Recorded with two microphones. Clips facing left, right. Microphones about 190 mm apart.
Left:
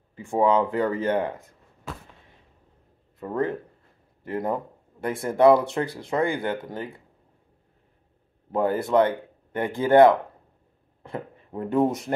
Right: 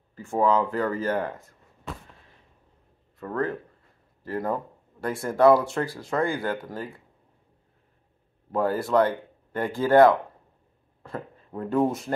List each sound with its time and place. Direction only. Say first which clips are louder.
0.1 s speech: left 2 dB; 15° left (ahead or behind)
3.2 s speech: left 2 dB; 20° left (ahead or behind)
8.5 s speech: left 1 dB; 20° left (ahead or behind)